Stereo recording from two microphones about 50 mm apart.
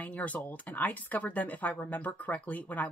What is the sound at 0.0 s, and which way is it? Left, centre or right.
Speech, left.